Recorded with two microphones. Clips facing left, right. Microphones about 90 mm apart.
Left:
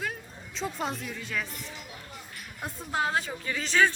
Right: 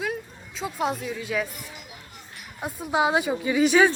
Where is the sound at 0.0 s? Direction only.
5° right (ahead or behind).